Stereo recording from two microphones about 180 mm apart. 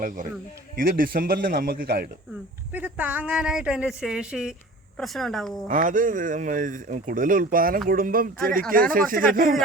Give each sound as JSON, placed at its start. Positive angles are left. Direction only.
{"t": 0.0, "sound": "a man's voice", "side_deg": -45}
{"t": 2.7, "sound": "speech", "side_deg": -10}
{"t": 5.6, "sound": "speech", "side_deg": -45}